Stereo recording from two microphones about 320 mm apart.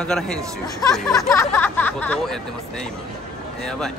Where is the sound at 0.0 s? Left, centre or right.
Centre.